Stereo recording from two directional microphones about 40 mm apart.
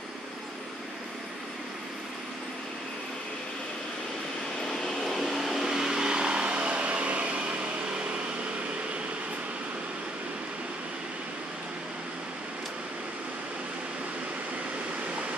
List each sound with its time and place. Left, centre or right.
5.0 s vehicle: centre; by 7.4 s right